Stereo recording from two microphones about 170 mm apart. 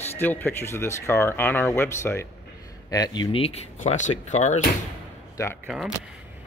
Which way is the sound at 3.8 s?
45° left (ahead or behind).